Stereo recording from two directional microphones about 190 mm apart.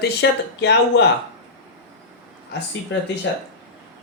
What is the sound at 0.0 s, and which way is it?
Speech, 65° left (ahead or behind).